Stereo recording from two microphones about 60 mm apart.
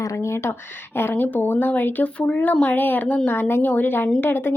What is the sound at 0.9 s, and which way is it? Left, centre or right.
Speech, left.